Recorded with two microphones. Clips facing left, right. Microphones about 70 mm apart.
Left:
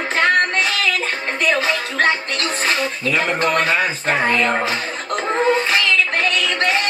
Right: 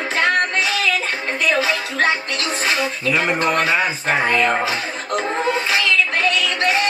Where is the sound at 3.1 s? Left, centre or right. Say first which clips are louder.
Even; centre.